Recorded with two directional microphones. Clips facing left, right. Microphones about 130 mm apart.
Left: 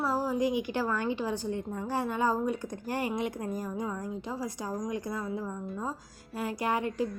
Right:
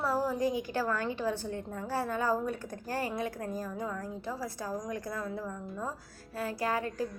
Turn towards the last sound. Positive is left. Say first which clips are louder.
# left 2 dB
turn(degrees=20)  # may be behind; listen again after turning